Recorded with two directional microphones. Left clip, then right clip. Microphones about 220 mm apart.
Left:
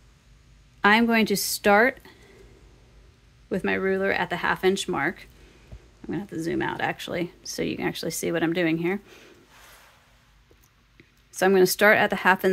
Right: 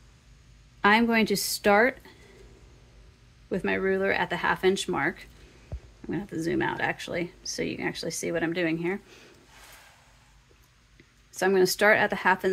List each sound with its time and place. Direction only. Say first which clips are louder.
0.7 s speech: left 2 dB; 20° left (ahead or behind)
3.4 s speech: left 2 dB; 25° left (ahead or behind)
11.3 s speech: left 3 dB; 20° left (ahead or behind)